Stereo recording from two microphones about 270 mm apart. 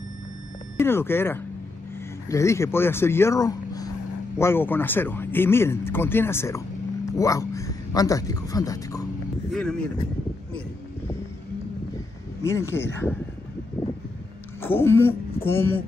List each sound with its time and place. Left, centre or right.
0.7 s speech: centre
12.4 s speech: centre
13.8 s a sound: centre
14.6 s speech: centre